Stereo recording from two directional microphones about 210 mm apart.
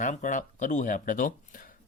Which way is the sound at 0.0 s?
35° left (ahead or behind).